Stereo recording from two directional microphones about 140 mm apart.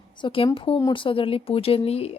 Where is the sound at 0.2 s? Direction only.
40° left (ahead or behind).